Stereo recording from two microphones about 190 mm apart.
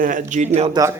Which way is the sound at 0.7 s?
20° right (ahead or behind).